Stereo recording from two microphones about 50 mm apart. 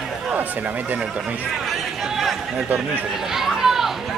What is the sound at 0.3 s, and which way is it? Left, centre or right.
Speech, right.